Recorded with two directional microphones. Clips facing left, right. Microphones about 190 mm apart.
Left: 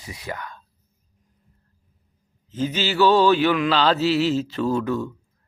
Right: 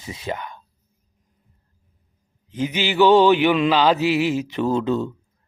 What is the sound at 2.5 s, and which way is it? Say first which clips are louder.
Speech: right 2 dB; 15° right (ahead or behind).